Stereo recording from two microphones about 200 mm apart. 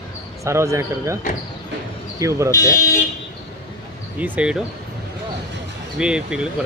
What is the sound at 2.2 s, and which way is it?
Speech, 15° right (ahead or behind).